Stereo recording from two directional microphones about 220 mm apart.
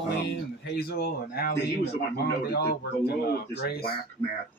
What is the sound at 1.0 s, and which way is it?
A man's voice, 50° left (ahead or behind).